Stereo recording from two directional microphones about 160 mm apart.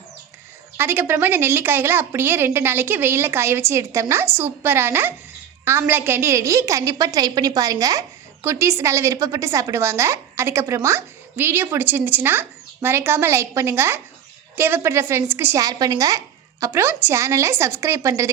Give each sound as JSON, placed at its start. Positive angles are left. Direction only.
{"t": 0.8, "sound": "a woman's voice", "side_deg": -15}